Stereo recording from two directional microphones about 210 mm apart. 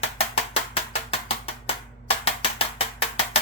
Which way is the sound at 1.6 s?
25° left (ahead or behind).